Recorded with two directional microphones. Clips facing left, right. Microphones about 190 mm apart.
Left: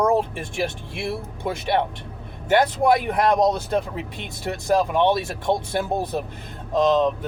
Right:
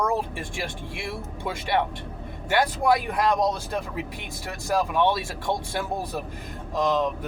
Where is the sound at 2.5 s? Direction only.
20° left (ahead or behind).